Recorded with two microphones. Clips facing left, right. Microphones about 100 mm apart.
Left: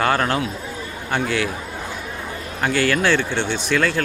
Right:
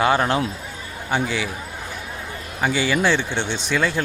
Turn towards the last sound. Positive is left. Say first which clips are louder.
# left 2 dB
turn(degrees=-15)  # may be behind; listen again after turning